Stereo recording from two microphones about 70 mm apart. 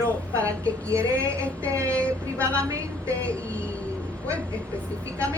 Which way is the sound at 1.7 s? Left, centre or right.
Right.